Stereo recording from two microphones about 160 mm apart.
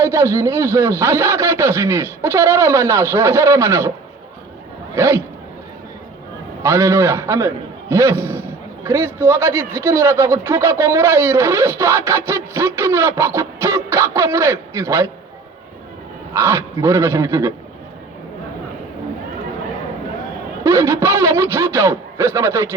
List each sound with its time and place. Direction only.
0.0 s a man's voice: 15° right (ahead or behind)
4.9 s a man's voice: 15° right (ahead or behind)
6.6 s a man's voice: 15° right (ahead or behind)
16.3 s a man's voice: 15° right (ahead or behind)
20.7 s a man's voice: 15° right (ahead or behind)